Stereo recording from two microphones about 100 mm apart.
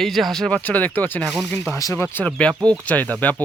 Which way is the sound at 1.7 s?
30° left (ahead or behind).